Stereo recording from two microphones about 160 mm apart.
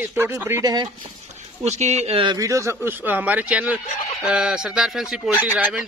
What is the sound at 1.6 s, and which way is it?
Speech, 45° right (ahead or behind).